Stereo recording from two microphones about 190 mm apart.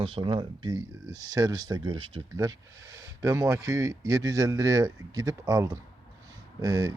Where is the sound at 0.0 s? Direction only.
30° right (ahead or behind).